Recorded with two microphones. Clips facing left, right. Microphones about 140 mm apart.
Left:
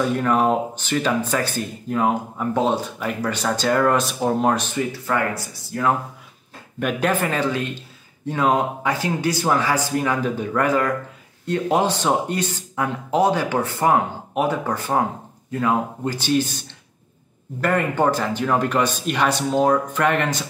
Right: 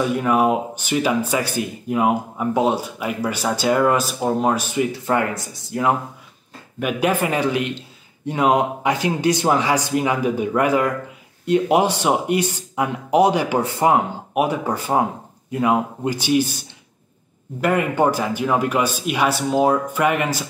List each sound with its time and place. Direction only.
0.1 s speech: 10° right (ahead or behind)
4.7 s speech: 20° right (ahead or behind)
6.8 s speech: 10° right (ahead or behind)
17.6 s speech: 10° right (ahead or behind)